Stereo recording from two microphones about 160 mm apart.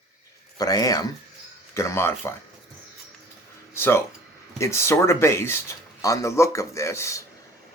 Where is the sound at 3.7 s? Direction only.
15° left (ahead or behind).